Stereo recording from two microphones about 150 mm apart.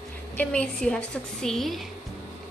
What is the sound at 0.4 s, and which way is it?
A woman's voice, 5° left (ahead or behind).